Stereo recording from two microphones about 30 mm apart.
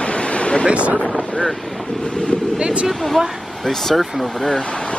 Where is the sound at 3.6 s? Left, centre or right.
Centre.